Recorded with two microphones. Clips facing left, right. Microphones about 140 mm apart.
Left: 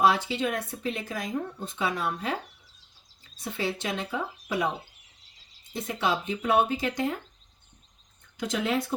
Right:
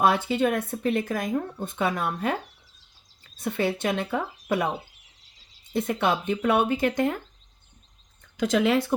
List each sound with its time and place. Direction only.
0.0 s speech: 50° right (ahead or behind)
3.3 s speech: 55° right (ahead or behind)
5.7 s speech: 55° right (ahead or behind)
8.4 s speech: 90° right